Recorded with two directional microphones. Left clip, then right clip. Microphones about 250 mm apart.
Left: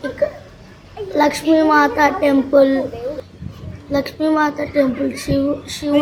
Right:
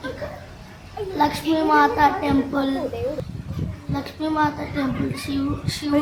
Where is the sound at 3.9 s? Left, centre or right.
Centre.